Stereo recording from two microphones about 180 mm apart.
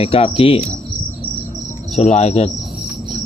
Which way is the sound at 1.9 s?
40° left (ahead or behind).